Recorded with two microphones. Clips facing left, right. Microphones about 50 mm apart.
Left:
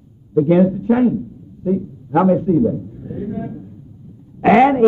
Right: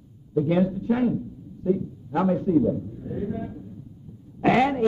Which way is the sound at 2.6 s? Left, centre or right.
Centre.